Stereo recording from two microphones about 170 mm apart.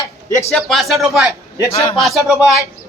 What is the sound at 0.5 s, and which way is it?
Speech, centre (ahead or behind).